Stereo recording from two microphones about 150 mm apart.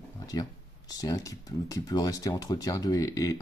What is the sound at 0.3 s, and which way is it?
Speech, 25° left (ahead or behind).